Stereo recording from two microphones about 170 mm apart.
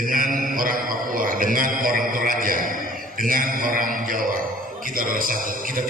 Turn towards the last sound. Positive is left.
turn(degrees=-55)  # may be behind; listen again after turning